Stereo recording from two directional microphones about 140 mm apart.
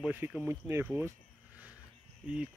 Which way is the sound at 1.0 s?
10° right (ahead or behind).